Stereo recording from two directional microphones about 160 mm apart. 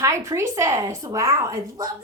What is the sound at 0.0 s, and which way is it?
A woman's voice, 20° right (ahead or behind).